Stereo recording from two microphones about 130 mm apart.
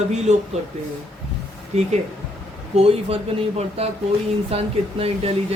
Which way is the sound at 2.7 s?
50° right (ahead or behind).